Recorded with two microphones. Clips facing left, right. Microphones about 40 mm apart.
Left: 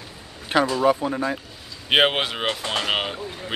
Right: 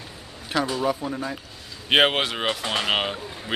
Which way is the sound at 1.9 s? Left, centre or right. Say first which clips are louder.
Even; centre.